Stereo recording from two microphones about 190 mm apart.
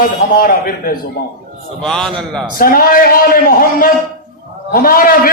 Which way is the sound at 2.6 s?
50° left (ahead or behind).